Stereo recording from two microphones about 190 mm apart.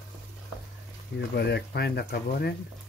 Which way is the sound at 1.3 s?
60° left (ahead or behind).